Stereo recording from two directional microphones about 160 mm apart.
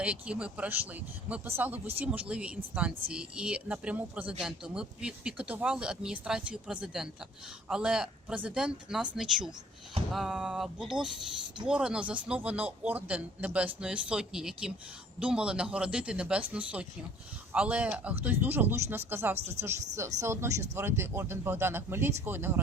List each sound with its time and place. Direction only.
0.0 s speech: 5° right (ahead or behind)